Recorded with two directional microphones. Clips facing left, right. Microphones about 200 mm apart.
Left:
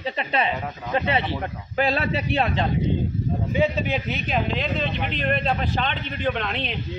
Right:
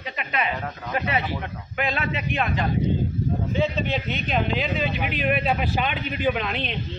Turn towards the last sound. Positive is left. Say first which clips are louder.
# right 1 dB
turn(degrees=0)  # may be behind; listen again after turning